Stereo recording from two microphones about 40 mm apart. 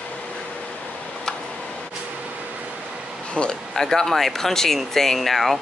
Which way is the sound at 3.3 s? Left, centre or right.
Left.